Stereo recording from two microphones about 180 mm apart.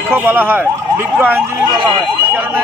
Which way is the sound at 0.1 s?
10° right (ahead or behind).